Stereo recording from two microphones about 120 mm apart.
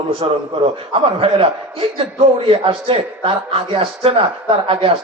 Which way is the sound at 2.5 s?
50° right (ahead or behind).